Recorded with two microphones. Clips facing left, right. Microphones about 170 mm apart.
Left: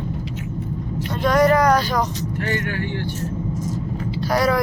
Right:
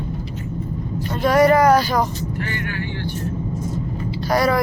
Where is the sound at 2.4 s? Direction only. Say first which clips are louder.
Left 5 dB; 45° left (ahead or behind).